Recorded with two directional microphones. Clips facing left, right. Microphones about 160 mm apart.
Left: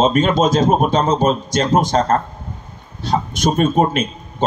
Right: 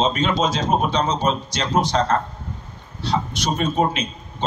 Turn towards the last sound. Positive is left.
turn(degrees=50)  # may be behind; listen again after turning